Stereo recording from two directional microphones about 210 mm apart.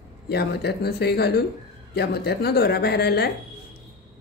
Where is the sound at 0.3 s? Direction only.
50° left (ahead or behind).